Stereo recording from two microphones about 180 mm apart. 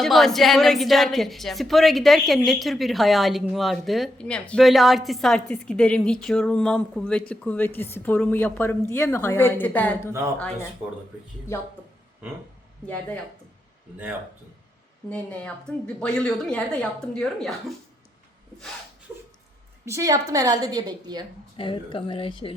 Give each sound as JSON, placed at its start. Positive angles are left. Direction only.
{"t": 0.0, "sound": "a woman's voice", "side_deg": 0}
{"t": 15.1, "sound": "a woman's voice", "side_deg": 5}
{"t": 19.8, "sound": "a woman's voice", "side_deg": -15}
{"t": 21.6, "sound": "a woman's voice", "side_deg": 30}